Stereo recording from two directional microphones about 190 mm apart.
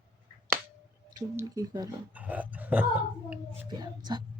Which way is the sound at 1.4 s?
20° right (ahead or behind).